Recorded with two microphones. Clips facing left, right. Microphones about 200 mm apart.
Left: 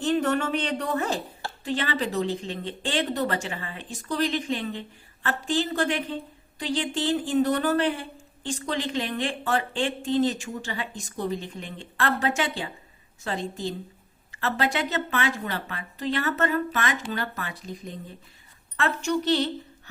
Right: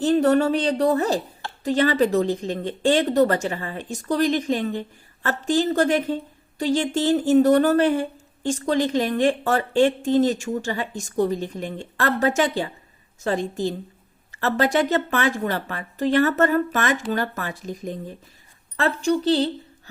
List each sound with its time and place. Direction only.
0.0 s speech: 35° right (ahead or behind)
18.8 s speech: 35° right (ahead or behind)